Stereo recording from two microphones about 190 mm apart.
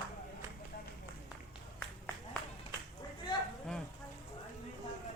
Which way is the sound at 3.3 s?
25° left (ahead or behind).